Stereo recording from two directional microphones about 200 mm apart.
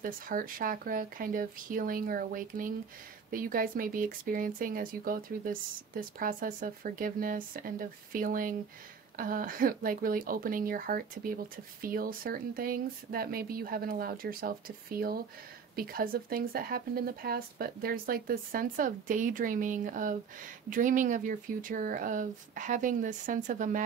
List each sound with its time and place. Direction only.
0.0 s speech: 45° right (ahead or behind)